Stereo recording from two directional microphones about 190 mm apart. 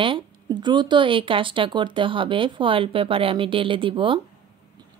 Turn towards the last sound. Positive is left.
turn(degrees=-25)  # may be behind; listen again after turning